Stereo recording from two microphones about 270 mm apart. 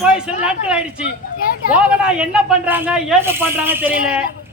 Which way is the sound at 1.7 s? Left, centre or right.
Centre.